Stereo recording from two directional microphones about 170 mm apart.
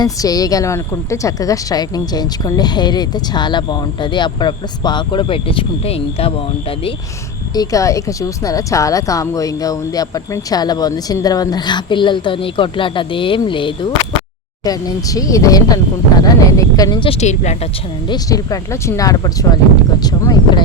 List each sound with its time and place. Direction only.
0.0 s a woman's voice: 20° left (ahead or behind)
7.5 s a woman's voice: 20° left (ahead or behind); by 17.6 s 40° left (ahead or behind)
18.1 s a woman's voice: 20° left (ahead or behind)